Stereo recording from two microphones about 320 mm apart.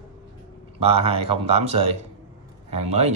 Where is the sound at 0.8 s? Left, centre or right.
Centre.